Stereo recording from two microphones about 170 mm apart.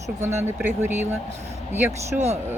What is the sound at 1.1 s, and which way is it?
Speech, 40° right (ahead or behind).